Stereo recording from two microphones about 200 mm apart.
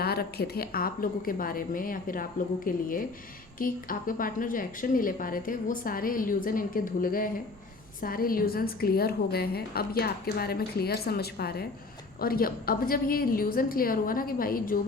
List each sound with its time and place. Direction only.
0.0 s a woman's voice: 50° left (ahead or behind)